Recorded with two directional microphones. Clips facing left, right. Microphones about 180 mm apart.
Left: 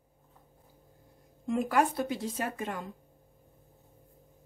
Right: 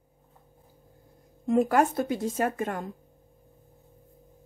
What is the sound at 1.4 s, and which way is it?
Speech, 45° right (ahead or behind).